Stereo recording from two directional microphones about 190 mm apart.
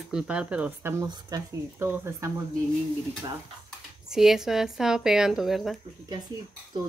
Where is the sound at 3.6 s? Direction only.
5° right (ahead or behind).